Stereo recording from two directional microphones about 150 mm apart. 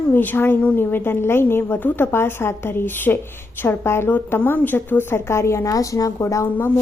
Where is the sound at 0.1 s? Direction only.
15° left (ahead or behind).